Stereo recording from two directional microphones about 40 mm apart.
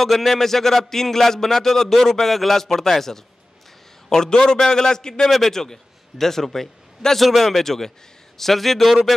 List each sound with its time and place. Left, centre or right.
0.0 s a man's voice: centre